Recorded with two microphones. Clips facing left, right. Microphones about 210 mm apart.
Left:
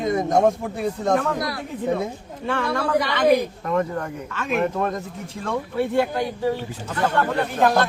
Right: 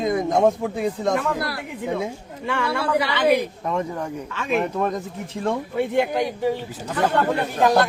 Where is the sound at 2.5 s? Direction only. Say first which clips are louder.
Left 1 dB; 10° right (ahead or behind).